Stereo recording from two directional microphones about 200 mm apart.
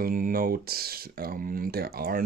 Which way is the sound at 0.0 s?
45° right (ahead or behind).